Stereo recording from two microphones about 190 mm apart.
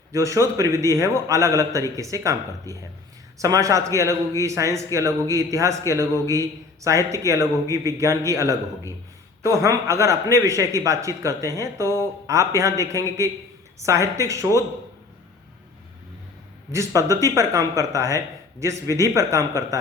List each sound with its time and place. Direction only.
0.1 s a man's voice: 15° right (ahead or behind)
16.7 s a man's voice: 15° right (ahead or behind)